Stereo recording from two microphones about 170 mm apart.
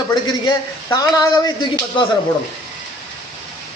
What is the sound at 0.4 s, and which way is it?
A man's voice, 20° left (ahead or behind).